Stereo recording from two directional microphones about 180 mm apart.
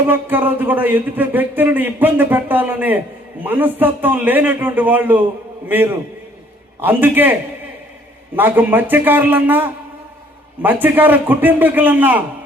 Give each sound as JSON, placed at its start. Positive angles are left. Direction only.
{"t": 0.1, "sound": "speech", "side_deg": -10}
{"t": 8.4, "sound": "speech", "side_deg": -10}